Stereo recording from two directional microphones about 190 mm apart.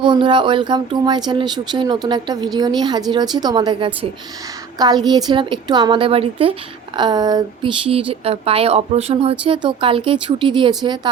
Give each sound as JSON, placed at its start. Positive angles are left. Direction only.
{"t": 0.0, "sound": "a woman's voice", "side_deg": -25}